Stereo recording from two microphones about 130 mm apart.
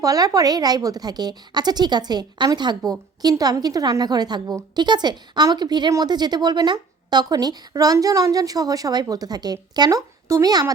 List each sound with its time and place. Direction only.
0.0 s a woman's voice: 25° right (ahead or behind)